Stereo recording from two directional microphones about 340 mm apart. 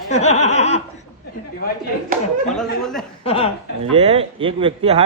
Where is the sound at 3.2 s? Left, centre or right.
Centre.